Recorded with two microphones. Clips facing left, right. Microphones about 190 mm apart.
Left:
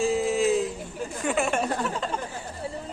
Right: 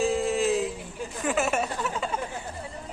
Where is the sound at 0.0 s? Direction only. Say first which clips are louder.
Left 1 dB; centre (ahead or behind).